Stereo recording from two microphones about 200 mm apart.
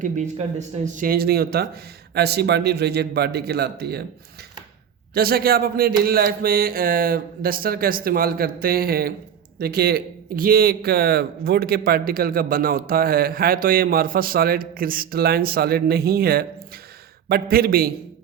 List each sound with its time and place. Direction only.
0.0 s speech: 35° right (ahead or behind)
0.9 s a man's voice: 45° right (ahead or behind)
5.1 s a man's voice: 50° right (ahead or behind)